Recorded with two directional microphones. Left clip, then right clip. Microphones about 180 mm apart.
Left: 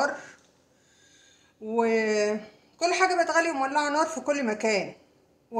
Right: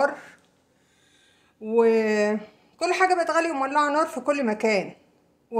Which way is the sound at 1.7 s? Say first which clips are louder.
Right 4 dB; 30° right (ahead or behind).